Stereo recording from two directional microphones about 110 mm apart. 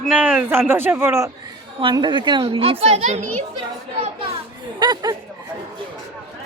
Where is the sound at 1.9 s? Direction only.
45° right (ahead or behind).